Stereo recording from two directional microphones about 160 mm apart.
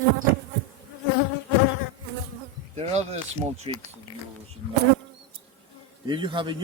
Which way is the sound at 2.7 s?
45° right (ahead or behind).